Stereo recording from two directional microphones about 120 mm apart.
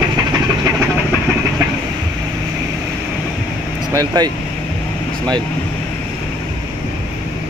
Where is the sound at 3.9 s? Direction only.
30° right (ahead or behind).